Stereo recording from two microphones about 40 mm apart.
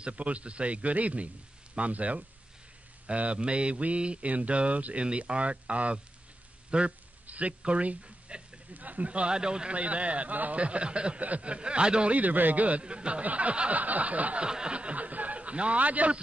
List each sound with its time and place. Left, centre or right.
0.0 s mantra: right
6.7 s speech: right
7.2 s mantra: right
8.3 s speech: right
8.7 s mantra: right
9.3 s speech: right
9.8 s mantra: right
10.6 s speech: right
12.1 s a man's voice: right
12.8 s speech: right
13.2 s mantra: right
14.4 s speech: right